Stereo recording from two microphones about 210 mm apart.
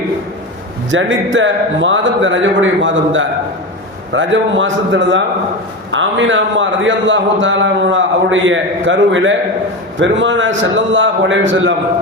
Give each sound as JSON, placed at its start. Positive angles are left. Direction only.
{"t": 0.9, "sound": "a man's voice", "side_deg": -65}